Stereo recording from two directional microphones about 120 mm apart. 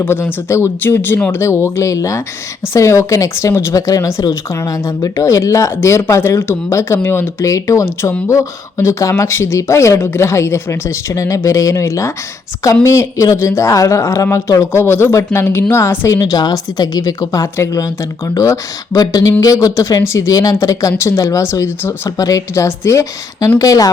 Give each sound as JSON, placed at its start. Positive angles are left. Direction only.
{"t": 0.0, "sound": "speech", "side_deg": 20}
{"t": 16.1, "sound": "speech", "side_deg": 35}